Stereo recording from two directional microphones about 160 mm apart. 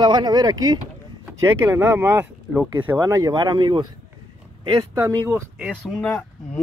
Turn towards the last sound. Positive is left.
turn(degrees=0)  # may be behind; listen again after turning